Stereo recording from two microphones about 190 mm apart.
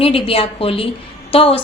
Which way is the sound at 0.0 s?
30° left (ahead or behind).